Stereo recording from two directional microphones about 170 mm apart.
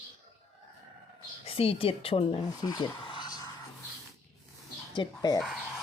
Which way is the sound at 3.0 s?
25° left (ahead or behind).